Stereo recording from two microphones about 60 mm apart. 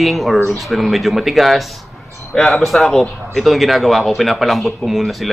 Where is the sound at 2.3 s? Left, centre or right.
Centre.